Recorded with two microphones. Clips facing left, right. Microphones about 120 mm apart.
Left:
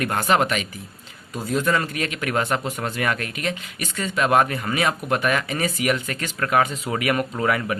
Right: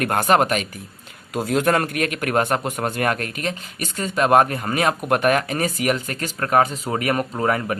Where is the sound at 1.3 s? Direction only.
75° right (ahead or behind).